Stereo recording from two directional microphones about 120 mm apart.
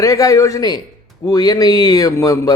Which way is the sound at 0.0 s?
30° left (ahead or behind).